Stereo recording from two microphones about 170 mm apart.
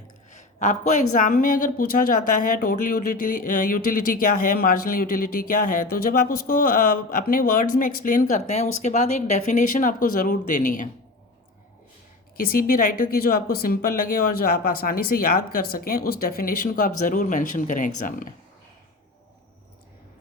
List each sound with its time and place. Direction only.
0.3 s speech: 45° left (ahead or behind)
12.4 s speech: 60° left (ahead or behind)